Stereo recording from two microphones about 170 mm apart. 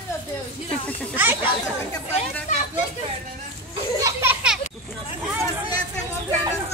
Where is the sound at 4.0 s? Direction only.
15° right (ahead or behind).